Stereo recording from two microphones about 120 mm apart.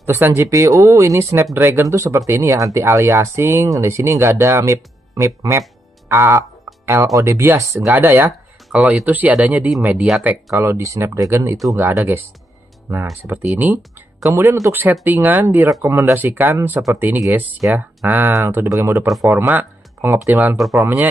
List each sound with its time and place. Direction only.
0.0 s speech: 20° right (ahead or behind)
13.2 s speech: 20° right (ahead or behind)